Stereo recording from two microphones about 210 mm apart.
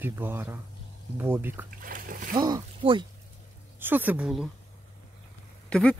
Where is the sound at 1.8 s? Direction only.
40° right (ahead or behind).